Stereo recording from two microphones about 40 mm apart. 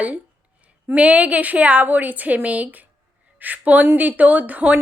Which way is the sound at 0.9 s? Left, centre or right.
Right.